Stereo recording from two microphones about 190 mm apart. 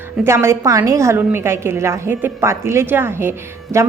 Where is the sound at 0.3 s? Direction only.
15° right (ahead or behind).